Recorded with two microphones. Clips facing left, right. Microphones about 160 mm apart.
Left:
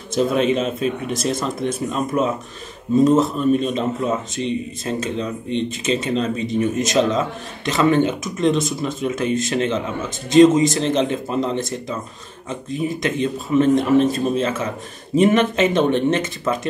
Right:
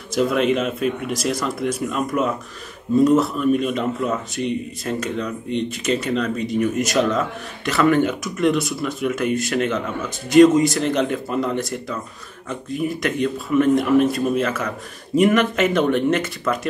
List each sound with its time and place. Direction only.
0.1 s a man's voice: 25° left (ahead or behind)
0.4 s a man's voice: 60° right (ahead or behind)
1.1 s a man's voice: 25° left (ahead or behind)
13.0 s a man's voice: 20° left (ahead or behind)